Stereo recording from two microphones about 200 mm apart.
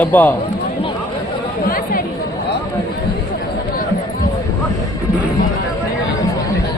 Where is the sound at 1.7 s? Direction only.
45° left (ahead or behind).